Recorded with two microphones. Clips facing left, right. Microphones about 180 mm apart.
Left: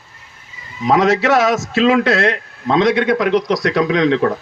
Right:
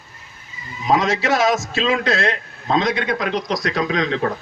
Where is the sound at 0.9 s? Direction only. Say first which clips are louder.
Left 5 dB; 65° left (ahead or behind).